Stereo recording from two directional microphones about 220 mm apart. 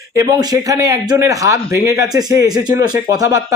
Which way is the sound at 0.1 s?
15° right (ahead or behind).